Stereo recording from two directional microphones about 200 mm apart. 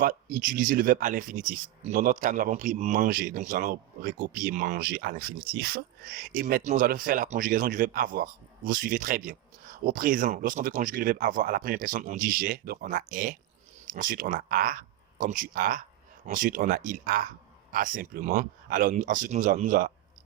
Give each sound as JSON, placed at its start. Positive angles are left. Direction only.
{"t": 0.0, "sound": "a man's voice", "side_deg": -45}